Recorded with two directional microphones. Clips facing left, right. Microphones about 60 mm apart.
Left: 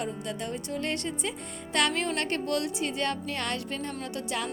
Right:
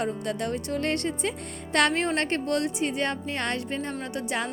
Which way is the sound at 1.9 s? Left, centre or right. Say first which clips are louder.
Right 3 dB; right.